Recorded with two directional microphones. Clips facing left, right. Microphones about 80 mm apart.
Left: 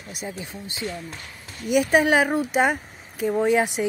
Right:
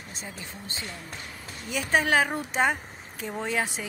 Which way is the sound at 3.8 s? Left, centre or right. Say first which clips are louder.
Left 12 dB; centre.